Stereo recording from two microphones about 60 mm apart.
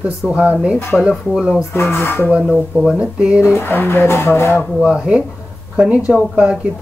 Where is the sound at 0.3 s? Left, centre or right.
Right.